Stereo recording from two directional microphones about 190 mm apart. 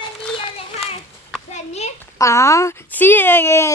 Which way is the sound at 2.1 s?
15° left (ahead or behind).